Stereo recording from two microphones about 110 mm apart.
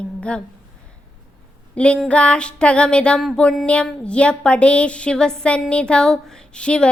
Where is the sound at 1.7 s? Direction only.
10° left (ahead or behind).